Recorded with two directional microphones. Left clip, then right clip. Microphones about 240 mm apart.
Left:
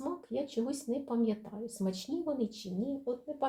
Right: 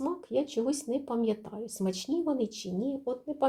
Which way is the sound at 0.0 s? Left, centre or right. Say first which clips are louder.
Right 6 dB; right.